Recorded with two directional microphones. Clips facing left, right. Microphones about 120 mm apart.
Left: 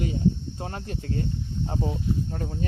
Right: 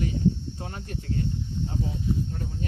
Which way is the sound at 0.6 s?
35° left (ahead or behind).